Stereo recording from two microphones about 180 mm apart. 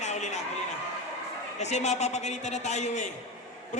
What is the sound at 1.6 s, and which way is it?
A man's voice, 40° left (ahead or behind).